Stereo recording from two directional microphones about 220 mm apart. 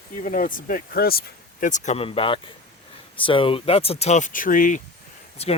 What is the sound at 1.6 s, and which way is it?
Speech, 35° left (ahead or behind).